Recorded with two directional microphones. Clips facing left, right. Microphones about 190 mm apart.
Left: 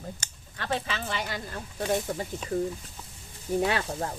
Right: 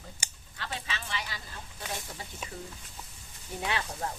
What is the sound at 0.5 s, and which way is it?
Speech, 50° left (ahead or behind).